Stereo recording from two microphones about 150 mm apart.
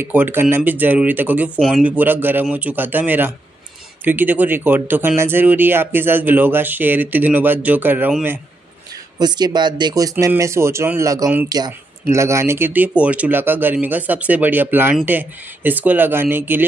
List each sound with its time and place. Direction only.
0.0 s speech: 15° right (ahead or behind)
9.2 s speech: 30° right (ahead or behind)